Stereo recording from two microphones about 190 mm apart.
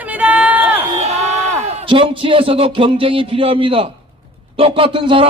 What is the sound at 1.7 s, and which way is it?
A man's voice, 25° right (ahead or behind).